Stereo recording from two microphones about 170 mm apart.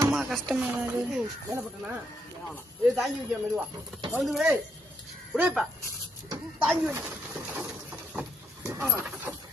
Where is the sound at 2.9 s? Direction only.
Centre (ahead or behind).